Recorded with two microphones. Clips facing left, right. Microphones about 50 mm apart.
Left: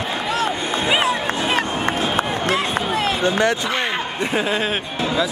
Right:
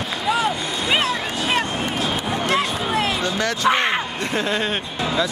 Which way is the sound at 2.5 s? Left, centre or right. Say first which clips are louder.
Right 1 dB; centre.